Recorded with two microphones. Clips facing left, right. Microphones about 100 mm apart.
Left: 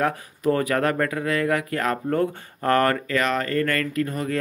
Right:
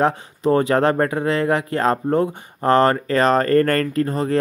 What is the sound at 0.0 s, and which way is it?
Speech, 25° right (ahead or behind).